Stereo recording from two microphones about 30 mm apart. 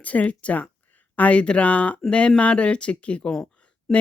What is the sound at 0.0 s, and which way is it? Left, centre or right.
Speech, left.